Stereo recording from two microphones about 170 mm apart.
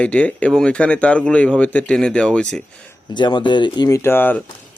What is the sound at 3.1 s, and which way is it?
Speech, 25° left (ahead or behind).